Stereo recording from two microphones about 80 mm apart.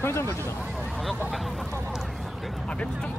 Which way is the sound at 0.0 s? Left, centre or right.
Left.